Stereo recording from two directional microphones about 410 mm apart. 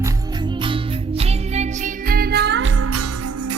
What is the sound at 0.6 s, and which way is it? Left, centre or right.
Music, centre.